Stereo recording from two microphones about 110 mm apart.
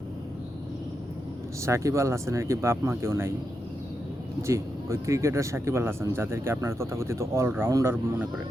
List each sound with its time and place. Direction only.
1.6 s speech: 25° right (ahead or behind)
4.4 s speech: 25° right (ahead or behind)